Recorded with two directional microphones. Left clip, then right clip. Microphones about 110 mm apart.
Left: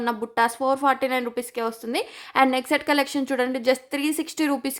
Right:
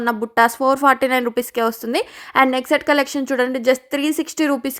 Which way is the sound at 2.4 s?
30° right (ahead or behind).